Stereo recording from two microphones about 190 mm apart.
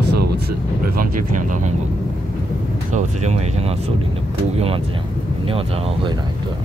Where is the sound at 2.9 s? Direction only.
40° right (ahead or behind).